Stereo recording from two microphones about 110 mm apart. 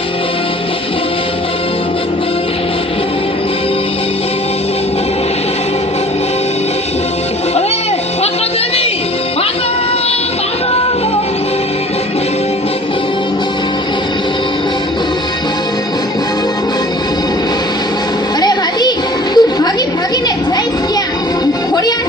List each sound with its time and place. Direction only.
18.4 s music: 40° left (ahead or behind)